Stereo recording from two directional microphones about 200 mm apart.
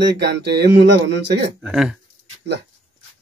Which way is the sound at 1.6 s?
5° right (ahead or behind).